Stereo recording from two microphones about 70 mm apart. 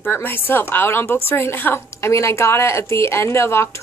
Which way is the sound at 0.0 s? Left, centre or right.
Left.